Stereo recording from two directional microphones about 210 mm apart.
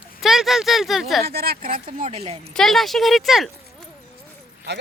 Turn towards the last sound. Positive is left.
turn(degrees=-55)  # may be behind; listen again after turning